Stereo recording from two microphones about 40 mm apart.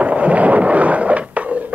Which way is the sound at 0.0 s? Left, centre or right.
Right.